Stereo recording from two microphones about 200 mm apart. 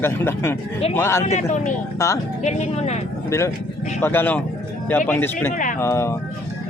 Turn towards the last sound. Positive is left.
turn(degrees=15)  # may be behind; listen again after turning